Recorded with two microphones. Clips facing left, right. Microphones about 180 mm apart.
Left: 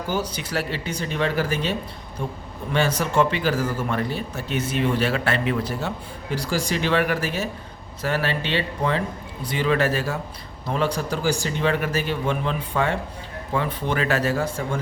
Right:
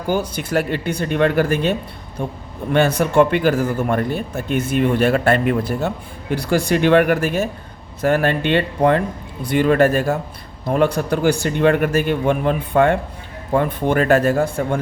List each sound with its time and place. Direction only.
0.1 s a man's voice: 55° right (ahead or behind)
2.7 s a man's voice: 55° right (ahead or behind)